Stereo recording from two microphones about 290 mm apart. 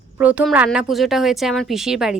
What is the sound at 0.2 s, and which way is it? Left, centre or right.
A woman's voice, centre.